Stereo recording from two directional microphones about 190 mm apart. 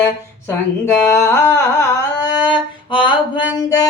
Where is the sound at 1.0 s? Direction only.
15° left (ahead or behind).